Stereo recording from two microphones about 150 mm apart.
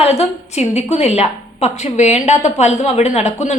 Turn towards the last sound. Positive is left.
turn(degrees=45)  # may be behind; listen again after turning